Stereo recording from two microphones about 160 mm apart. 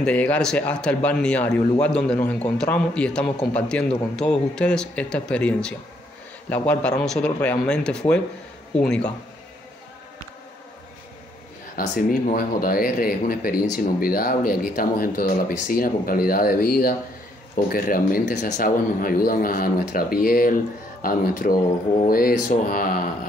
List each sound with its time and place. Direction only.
0.0 s a man's voice: 10° left (ahead or behind)
11.7 s speech: 60° left (ahead or behind)